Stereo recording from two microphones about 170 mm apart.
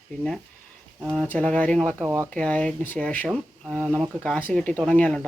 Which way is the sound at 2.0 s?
15° right (ahead or behind).